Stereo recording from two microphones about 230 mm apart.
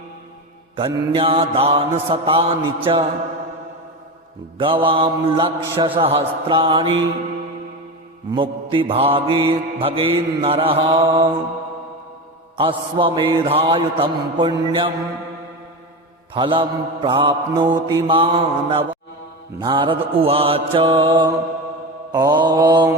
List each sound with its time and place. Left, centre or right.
0.8 s mantra: right
4.5 s mantra: right
8.3 s mantra: right
12.5 s mantra: right
16.3 s mantra: right